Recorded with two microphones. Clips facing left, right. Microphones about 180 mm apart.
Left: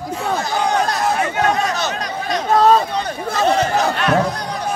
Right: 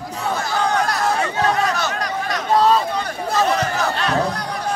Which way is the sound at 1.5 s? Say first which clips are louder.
Left 1 dB; 20° left (ahead or behind).